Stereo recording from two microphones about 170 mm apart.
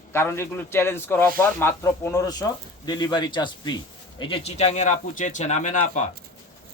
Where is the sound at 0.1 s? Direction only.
15° left (ahead or behind); by 6.1 s 45° left (ahead or behind).